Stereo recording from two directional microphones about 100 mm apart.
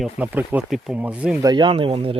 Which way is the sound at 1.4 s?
45° right (ahead or behind).